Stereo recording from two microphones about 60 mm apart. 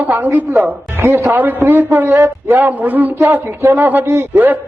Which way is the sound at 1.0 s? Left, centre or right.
Right.